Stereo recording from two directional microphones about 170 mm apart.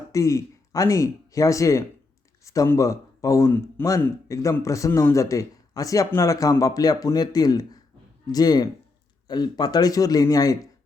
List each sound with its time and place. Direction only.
0.1 s a man's voice: 20° left (ahead or behind)